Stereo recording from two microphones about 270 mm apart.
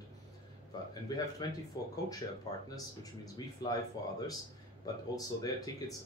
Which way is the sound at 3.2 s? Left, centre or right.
Centre.